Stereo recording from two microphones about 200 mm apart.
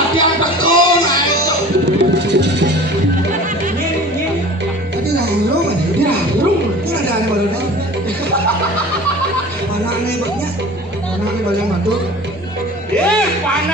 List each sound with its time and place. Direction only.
0.2 s music: 25° left (ahead or behind)
1.9 s music: 55° right (ahead or behind)
12.9 s music: 5° left (ahead or behind)